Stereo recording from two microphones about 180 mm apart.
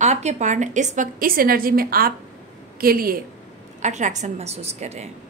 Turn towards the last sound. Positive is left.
turn(degrees=-40)  # may be behind; listen again after turning